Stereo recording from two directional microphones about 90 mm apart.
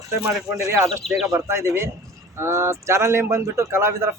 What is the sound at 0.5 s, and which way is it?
Speech, 30° right (ahead or behind).